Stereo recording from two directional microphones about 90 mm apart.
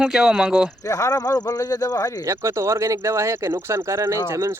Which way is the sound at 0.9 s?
35° left (ahead or behind).